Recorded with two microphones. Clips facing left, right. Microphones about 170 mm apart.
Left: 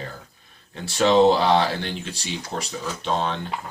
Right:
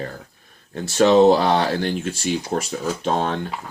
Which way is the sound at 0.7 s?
45° right (ahead or behind).